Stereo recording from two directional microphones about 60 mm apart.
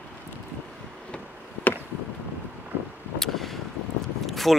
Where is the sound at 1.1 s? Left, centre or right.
Left.